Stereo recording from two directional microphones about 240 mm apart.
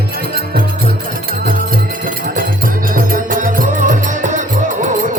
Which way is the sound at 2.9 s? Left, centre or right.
Right.